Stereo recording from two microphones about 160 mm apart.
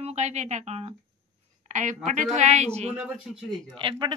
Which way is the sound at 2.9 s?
5° right (ahead or behind).